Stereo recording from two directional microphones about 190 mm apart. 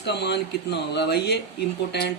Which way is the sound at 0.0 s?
65° left (ahead or behind).